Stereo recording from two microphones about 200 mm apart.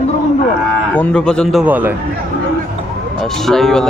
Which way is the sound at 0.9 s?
5° left (ahead or behind).